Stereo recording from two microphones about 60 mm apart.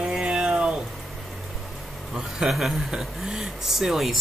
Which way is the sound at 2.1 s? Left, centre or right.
Centre.